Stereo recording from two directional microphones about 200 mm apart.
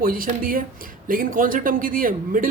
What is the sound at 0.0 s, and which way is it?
A man's voice, 45° right (ahead or behind).